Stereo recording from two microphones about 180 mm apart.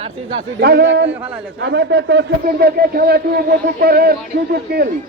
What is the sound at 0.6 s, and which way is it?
A man's voice, 65° right (ahead or behind).